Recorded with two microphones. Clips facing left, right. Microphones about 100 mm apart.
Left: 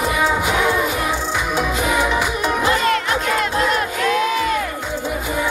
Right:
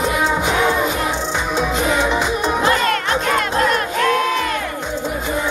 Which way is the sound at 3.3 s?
55° right (ahead or behind).